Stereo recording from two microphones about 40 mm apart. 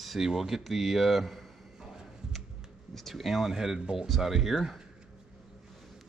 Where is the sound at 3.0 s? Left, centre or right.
Centre.